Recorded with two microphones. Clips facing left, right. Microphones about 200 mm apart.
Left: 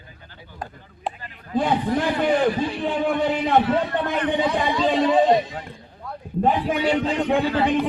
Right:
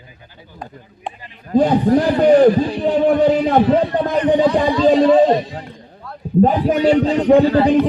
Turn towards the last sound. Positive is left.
turn(degrees=-40)  # may be behind; listen again after turning